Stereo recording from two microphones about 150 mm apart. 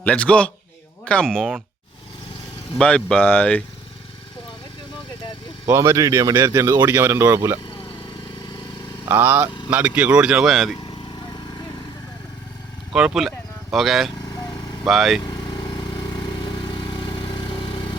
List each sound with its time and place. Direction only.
0.0 s speech: 10° left (ahead or behind)
2.7 s speech: 5° left (ahead or behind)
5.6 s speech: 20° right (ahead or behind)
9.0 s speech: 15° right (ahead or behind)
12.9 s speech: 5° right (ahead or behind)
16.4 s vehicle: 30° left (ahead or behind)